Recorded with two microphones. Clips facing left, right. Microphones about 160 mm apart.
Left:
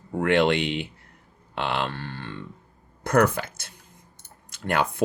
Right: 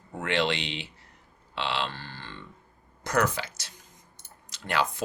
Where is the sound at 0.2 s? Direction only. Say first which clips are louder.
Left 7 dB; 55° left (ahead or behind).